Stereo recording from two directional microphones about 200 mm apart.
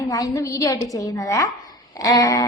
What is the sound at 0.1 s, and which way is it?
A woman's voice, 15° left (ahead or behind).